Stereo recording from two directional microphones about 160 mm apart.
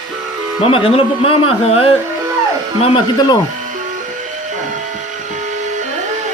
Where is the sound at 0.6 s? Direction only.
35° left (ahead or behind).